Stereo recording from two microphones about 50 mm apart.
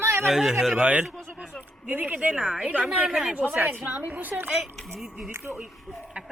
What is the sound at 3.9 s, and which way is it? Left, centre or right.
Speech, right.